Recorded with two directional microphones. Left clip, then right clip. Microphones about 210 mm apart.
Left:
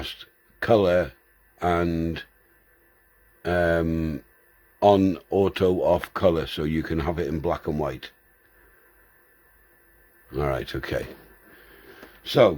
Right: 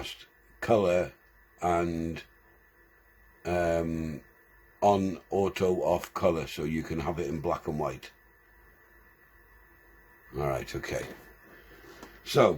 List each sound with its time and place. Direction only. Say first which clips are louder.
0.6 s speech: left 5 dB; 45° left (ahead or behind)
3.4 s speech: left 6 dB; 40° left (ahead or behind)
10.3 s speech: left 5 dB; 45° left (ahead or behind)
12.2 s speech: left 5 dB; 45° left (ahead or behind)